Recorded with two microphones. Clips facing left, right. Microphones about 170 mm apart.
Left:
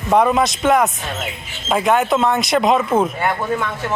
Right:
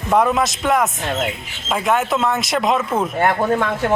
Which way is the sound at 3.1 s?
50° right (ahead or behind).